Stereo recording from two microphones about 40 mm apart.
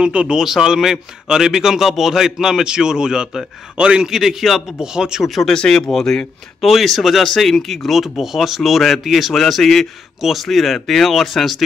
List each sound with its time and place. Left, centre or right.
0.0 s speech: right
0.4 s a man's voice: centre
4.0 s a man's voice: centre
4.7 s a man's voice: centre
5.2 s speech: centre
5.5 s speech: centre